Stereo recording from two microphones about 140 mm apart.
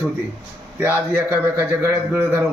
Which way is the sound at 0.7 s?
15° right (ahead or behind).